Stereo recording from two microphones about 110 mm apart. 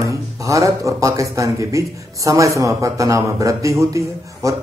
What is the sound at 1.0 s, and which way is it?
A man's voice, 30° right (ahead or behind).